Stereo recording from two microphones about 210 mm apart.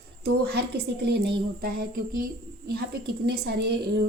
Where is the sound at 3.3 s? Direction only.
50° right (ahead or behind).